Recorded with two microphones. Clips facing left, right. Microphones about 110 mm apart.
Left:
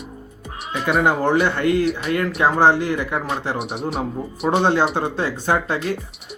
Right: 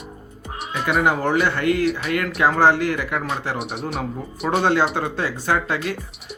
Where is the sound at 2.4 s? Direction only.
20° left (ahead or behind).